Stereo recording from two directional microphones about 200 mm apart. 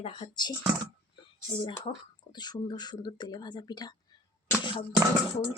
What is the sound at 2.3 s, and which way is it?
Speech, 20° left (ahead or behind).